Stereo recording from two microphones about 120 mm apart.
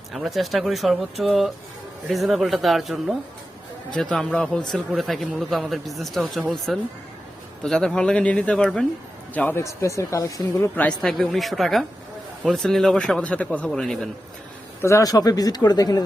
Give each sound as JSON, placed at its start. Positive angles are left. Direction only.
{"t": 0.1, "sound": "speech", "side_deg": 0}
{"t": 10.8, "sound": "speech", "side_deg": 10}
{"t": 14.8, "sound": "speech", "side_deg": 25}